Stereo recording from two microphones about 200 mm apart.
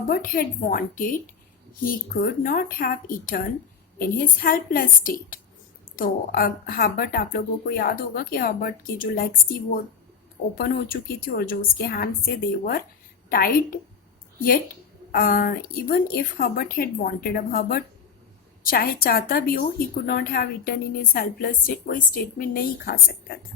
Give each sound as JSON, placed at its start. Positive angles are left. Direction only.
{"t": 0.1, "sound": "speech", "side_deg": 45}
{"t": 15.1, "sound": "speech", "side_deg": 45}